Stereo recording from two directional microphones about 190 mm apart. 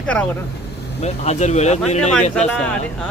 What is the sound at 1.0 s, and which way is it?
Speech, 35° left (ahead or behind).